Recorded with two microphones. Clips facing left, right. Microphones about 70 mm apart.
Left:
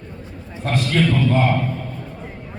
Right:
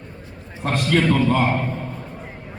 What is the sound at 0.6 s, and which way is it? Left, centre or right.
A man's voice, right.